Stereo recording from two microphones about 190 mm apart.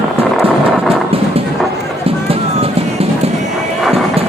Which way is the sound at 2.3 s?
30° right (ahead or behind).